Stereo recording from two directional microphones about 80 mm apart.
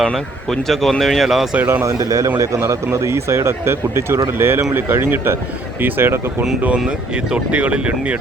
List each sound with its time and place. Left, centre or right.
0.0 s speech: centre
1.5 s speech: right
1.8 s a man's voice: right
7.3 s speech: centre